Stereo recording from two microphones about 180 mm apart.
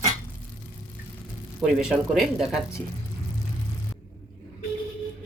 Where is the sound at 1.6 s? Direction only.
5° right (ahead or behind).